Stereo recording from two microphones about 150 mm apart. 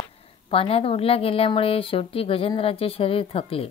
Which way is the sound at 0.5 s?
40° left (ahead or behind).